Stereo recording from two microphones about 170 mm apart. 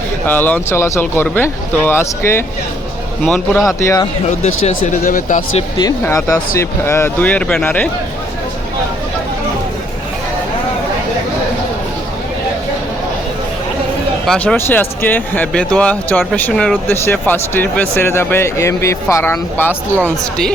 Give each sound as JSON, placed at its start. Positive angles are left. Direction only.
{"t": 0.3, "sound": "speech", "side_deg": 10}
{"t": 3.7, "sound": "speech", "side_deg": 20}
{"t": 4.3, "sound": "speech", "side_deg": 45}
{"t": 5.5, "sound": "speech", "side_deg": 25}
{"t": 14.3, "sound": "speech", "side_deg": 10}